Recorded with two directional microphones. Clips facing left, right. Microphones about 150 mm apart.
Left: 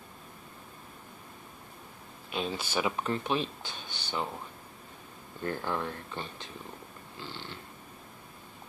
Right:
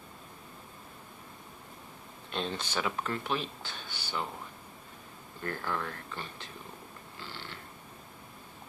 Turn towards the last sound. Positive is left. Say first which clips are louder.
# left 2 dB
turn(degrees=20)  # may be behind; listen again after turning